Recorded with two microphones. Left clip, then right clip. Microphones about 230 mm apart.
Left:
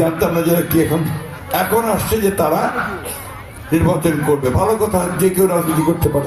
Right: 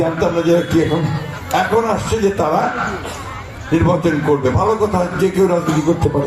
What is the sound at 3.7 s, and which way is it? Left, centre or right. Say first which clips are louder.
A man's voice: right 1 dB; left.